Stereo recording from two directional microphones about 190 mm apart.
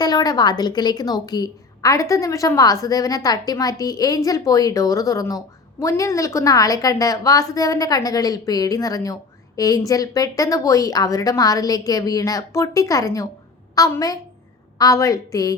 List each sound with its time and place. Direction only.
0.0 s a woman's voice: 20° left (ahead or behind)